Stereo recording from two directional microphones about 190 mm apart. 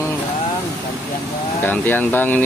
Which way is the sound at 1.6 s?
10° left (ahead or behind).